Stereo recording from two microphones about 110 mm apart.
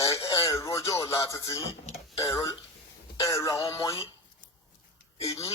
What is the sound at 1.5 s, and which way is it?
Speech, 60° left (ahead or behind).